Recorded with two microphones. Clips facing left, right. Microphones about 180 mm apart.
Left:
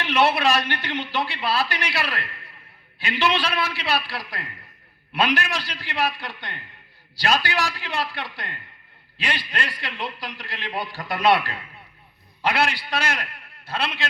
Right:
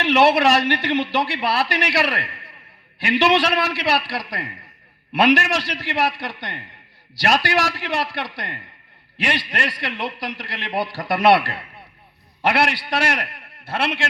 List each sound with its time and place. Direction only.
0.0 s a man's voice: 75° right (ahead or behind)